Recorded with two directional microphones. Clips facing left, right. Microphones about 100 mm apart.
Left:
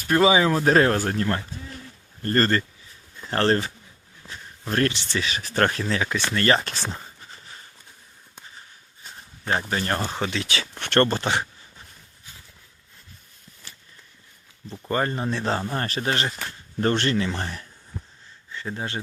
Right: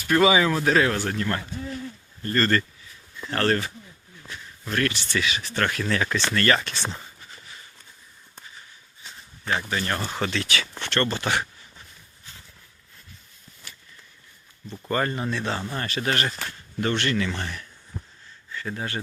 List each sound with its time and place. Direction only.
0.1 s speech: 25° left (ahead or behind)
3.2 s speech: 30° left (ahead or behind)
4.3 s a sound: 35° left (ahead or behind)
5.2 s speech: 40° left (ahead or behind)
5.8 s speech: 15° left (ahead or behind)
6.4 s speech: 30° left (ahead or behind)
9.5 s speech: 35° left (ahead or behind)
10.0 s speech: 20° left (ahead or behind)
10.8 s speech: 55° left (ahead or behind)
11.2 s speech: 25° left (ahead or behind)
14.8 s speech: 25° left (ahead or behind)
17.9 s a sound: 10° right (ahead or behind)
18.5 s speech: 25° left (ahead or behind)